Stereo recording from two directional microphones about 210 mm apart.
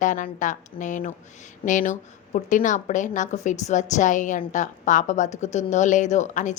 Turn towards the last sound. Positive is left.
turn(degrees=35)  # may be behind; listen again after turning